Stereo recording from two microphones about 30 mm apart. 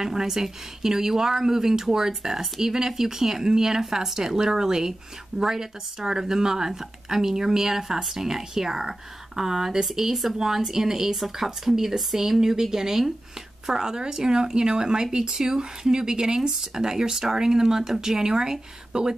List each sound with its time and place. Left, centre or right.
0.0 s speech: centre